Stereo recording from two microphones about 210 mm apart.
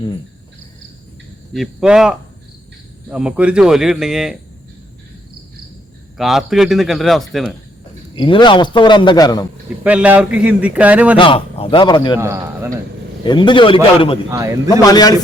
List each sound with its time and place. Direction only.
1.5 s speech: centre (ahead or behind)
6.1 s speech: centre (ahead or behind)
8.1 s a man's voice: 20° left (ahead or behind)
9.8 s speech: 5° right (ahead or behind)
11.2 s a man's voice: 25° left (ahead or behind)
12.1 s speech: 15° right (ahead or behind)
13.2 s a man's voice: 20° left (ahead or behind)
14.3 s speech: 15° right (ahead or behind)
14.7 s speech: 20° left (ahead or behind)